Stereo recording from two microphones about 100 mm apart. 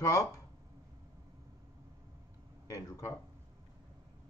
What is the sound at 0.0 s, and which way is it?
Speech, 35° left (ahead or behind).